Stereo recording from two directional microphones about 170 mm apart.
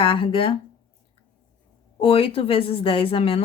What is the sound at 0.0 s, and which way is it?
Speech, 30° left (ahead or behind).